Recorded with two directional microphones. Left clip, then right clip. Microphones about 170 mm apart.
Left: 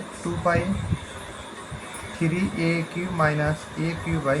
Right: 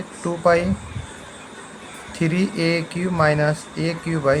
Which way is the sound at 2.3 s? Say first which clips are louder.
Right 5 dB; 50° right (ahead or behind).